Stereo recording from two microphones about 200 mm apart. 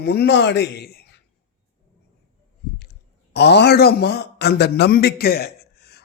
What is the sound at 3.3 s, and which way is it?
A man's voice, 55° left (ahead or behind).